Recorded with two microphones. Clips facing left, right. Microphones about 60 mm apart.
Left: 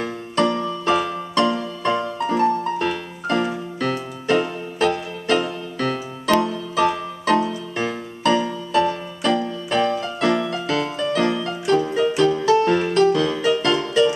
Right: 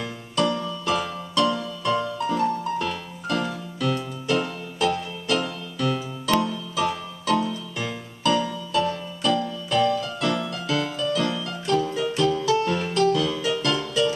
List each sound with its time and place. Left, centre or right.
0.0 s music: left